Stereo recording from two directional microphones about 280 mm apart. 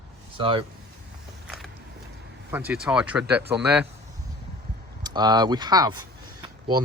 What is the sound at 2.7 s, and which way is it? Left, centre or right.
Speech, centre.